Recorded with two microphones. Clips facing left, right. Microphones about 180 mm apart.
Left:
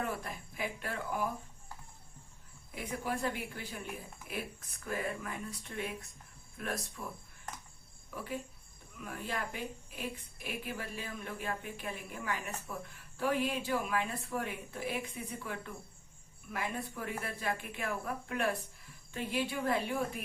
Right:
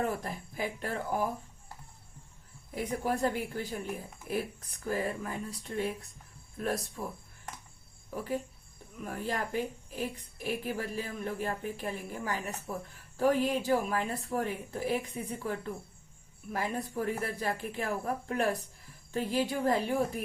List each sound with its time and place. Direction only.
0.3 s speech: 40° right (ahead or behind)
2.7 s speech: 40° right (ahead or behind)
8.1 s speech: 40° right (ahead or behind)